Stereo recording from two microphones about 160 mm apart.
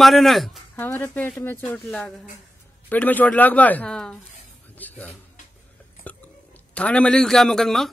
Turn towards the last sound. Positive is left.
turn(degrees=0)  # may be behind; listen again after turning